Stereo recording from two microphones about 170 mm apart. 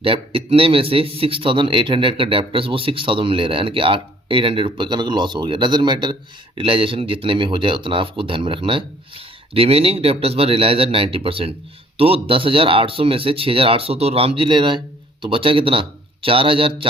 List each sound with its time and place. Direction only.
0.0 s a man's voice: 35° right (ahead or behind)